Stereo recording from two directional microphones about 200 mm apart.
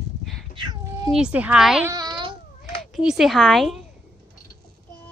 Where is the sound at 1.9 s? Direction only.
20° right (ahead or behind).